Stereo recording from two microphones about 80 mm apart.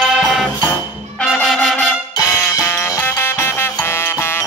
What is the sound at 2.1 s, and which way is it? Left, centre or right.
Music, left.